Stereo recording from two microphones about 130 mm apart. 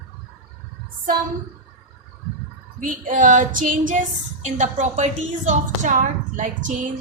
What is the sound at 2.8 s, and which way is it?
A woman's voice, 90° right.